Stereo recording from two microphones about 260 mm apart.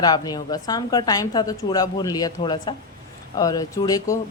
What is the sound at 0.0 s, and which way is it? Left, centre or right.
Speech, centre.